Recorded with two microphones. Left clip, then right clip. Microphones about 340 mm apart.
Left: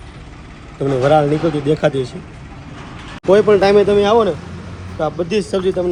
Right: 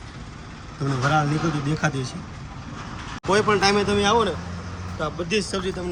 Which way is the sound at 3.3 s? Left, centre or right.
Centre.